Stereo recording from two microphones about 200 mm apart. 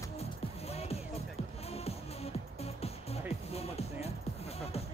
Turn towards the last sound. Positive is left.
turn(degrees=30)  # may be behind; listen again after turning